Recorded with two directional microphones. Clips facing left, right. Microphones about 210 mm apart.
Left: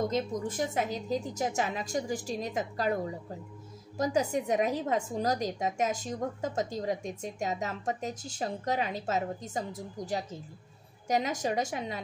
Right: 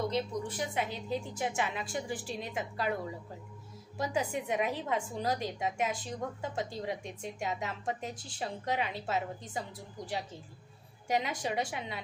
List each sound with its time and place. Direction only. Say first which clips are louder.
0.0 s a woman's voice: left 3 dB; 45° left (ahead or behind)
4.0 s a woman's voice: left 5 dB; 40° left (ahead or behind)